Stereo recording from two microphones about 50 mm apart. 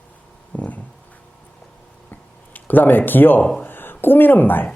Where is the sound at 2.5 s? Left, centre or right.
Left.